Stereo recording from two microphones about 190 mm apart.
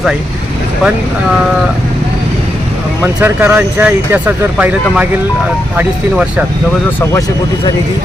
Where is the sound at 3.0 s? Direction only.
10° right (ahead or behind).